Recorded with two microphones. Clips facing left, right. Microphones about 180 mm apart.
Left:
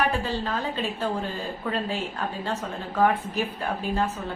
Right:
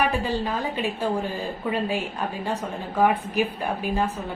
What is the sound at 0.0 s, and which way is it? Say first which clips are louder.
A woman's voice: right 2 dB; 15° right (ahead or behind).